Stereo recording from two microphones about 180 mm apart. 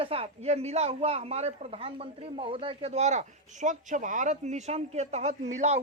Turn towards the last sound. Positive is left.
turn(degrees=-35)  # may be behind; listen again after turning